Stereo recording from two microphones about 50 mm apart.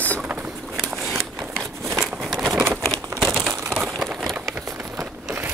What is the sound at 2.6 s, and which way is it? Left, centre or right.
Crumpling, right.